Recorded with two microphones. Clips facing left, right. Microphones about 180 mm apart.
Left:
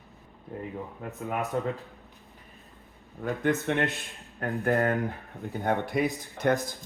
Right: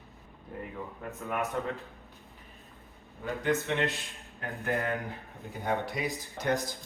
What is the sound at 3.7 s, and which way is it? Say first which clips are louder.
Speech: left 3 dB; 60° left (ahead or behind).